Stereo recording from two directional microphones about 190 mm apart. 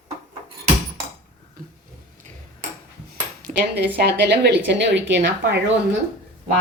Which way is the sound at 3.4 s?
60° right (ahead or behind).